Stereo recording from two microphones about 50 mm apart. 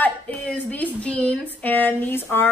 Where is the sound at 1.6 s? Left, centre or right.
Left.